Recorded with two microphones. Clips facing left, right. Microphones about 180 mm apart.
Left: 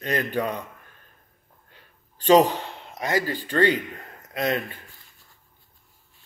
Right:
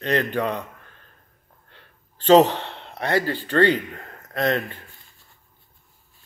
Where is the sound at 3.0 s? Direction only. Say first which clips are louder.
Right 3 dB; 10° left (ahead or behind).